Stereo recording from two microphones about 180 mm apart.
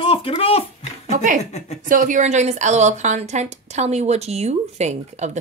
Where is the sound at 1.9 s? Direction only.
45° right (ahead or behind).